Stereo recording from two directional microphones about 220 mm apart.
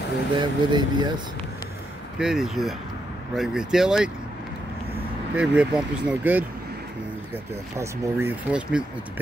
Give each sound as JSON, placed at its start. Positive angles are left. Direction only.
{"t": 0.3, "sound": "speech", "side_deg": -20}
{"t": 2.1, "sound": "speech", "side_deg": 0}
{"t": 5.3, "sound": "speech", "side_deg": -5}
{"t": 7.7, "sound": "speech", "side_deg": -15}